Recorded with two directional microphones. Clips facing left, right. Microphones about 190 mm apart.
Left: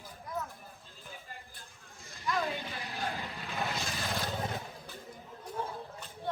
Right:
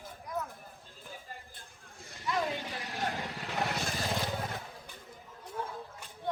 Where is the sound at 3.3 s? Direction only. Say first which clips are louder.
Right 3 dB; 75° right (ahead or behind).